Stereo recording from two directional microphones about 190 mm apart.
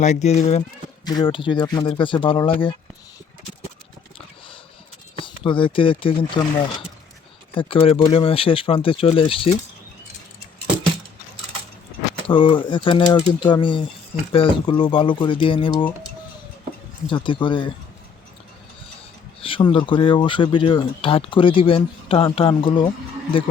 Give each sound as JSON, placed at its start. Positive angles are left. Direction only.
{"t": 0.0, "sound": "speech", "side_deg": 35}
{"t": 1.0, "sound": "speech", "side_deg": 25}
{"t": 5.2, "sound": "speech", "side_deg": 25}
{"t": 7.5, "sound": "speech", "side_deg": 25}
{"t": 12.3, "sound": "speech", "side_deg": 25}
{"t": 17.1, "sound": "speech", "side_deg": 25}
{"t": 19.4, "sound": "speech", "side_deg": 30}